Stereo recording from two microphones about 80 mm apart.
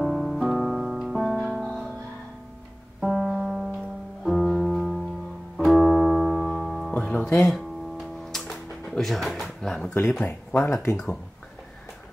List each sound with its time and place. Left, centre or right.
0.0 s music: centre
3.0 s music: centre
6.9 s music: centre
7.4 s music: centre
10.2 s speech: left